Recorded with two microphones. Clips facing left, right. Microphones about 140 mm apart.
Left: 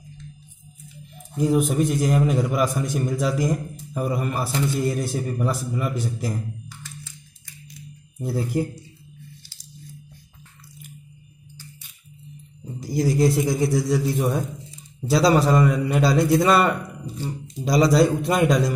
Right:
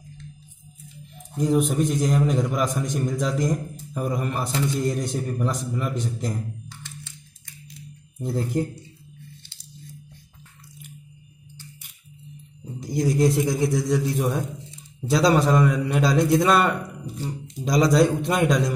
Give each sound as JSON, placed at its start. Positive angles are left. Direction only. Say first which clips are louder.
{"t": 1.3, "sound": "a man's voice", "louder": "left 1 dB", "side_deg": 5}
{"t": 8.2, "sound": "speech", "louder": "left 1 dB", "side_deg": 10}
{"t": 9.4, "sound": "squish", "louder": "even", "side_deg": -25}
{"t": 12.8, "sound": "a man's voice", "louder": "left 1 dB", "side_deg": 0}